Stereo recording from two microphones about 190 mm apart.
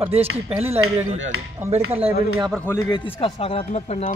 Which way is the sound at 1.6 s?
15° right (ahead or behind).